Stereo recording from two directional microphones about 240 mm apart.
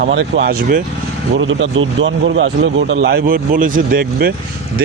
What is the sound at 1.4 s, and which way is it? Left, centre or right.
A man's voice, right.